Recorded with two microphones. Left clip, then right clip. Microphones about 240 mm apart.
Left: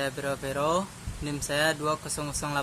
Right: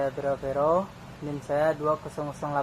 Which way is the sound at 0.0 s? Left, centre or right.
Left.